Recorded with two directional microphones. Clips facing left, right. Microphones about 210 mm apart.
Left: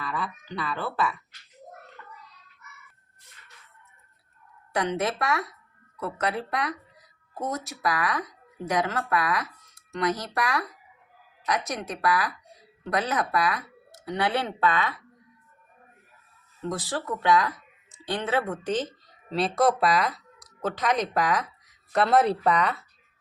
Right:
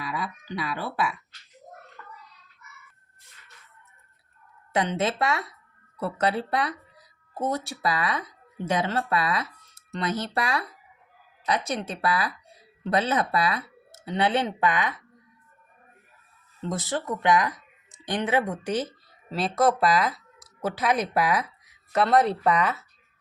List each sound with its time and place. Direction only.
0.0 s speech: 10° right (ahead or behind)
4.7 s speech: 25° right (ahead or behind)
16.6 s speech: 20° right (ahead or behind); by 22.8 s centre (ahead or behind)